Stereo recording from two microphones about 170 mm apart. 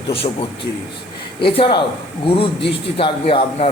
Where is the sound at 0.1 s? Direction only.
35° left (ahead or behind).